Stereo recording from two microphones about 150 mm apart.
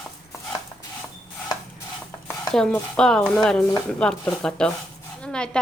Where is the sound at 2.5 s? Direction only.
5° left (ahead or behind).